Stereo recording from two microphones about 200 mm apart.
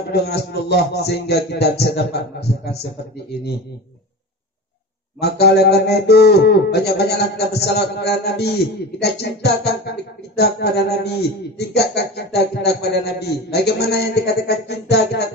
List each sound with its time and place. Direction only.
0.1 s speech: 55° left (ahead or behind)
5.2 s speech: 55° left (ahead or behind)